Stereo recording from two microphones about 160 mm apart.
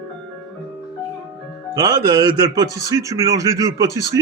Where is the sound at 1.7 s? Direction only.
25° right (ahead or behind).